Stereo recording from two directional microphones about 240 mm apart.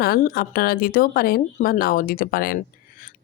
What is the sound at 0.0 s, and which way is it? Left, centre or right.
A woman's voice, left.